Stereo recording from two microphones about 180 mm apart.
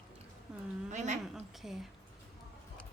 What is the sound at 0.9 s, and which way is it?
Speech, 40° right (ahead or behind).